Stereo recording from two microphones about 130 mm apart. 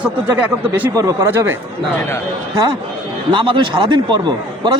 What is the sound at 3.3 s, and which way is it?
A man's voice, 40° right (ahead or behind).